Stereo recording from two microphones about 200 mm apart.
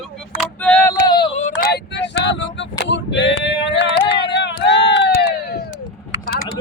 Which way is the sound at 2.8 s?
65° left (ahead or behind).